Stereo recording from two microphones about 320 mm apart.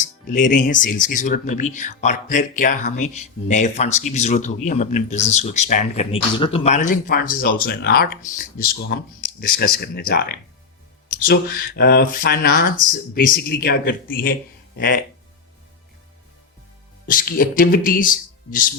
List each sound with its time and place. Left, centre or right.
0.0 s speech: left
17.1 s speech: left